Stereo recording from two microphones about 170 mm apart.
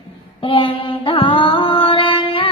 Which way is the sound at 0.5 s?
35° left (ahead or behind).